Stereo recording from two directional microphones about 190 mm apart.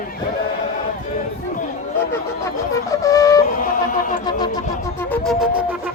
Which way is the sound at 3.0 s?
15° left (ahead or behind).